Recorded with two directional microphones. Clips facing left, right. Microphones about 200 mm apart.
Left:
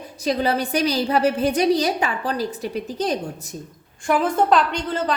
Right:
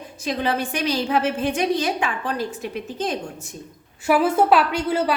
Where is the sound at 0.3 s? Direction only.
40° left (ahead or behind).